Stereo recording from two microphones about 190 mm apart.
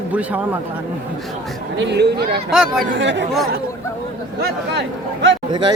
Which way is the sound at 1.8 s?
65° right (ahead or behind).